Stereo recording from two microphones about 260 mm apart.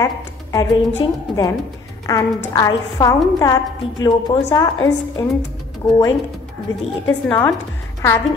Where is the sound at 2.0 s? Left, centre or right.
Centre.